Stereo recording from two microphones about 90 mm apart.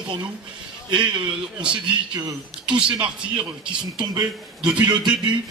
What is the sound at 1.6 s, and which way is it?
Speech, 10° right (ahead or behind).